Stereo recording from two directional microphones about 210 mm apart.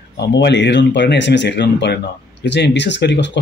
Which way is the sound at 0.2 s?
55° left (ahead or behind).